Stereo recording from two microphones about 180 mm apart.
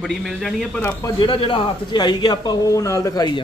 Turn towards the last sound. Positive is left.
turn(degrees=20)  # may be behind; listen again after turning